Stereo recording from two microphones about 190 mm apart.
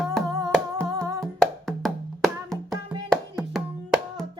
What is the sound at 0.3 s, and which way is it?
Music, 20° right (ahead or behind).